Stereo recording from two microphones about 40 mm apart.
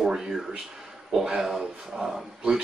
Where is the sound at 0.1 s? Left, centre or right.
Centre.